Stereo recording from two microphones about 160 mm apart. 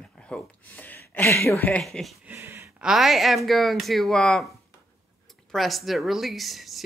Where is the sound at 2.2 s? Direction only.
15° right (ahead or behind).